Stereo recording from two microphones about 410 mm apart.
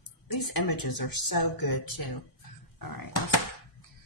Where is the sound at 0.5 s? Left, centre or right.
Left.